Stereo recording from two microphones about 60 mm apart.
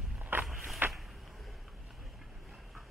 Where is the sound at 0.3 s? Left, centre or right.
Right.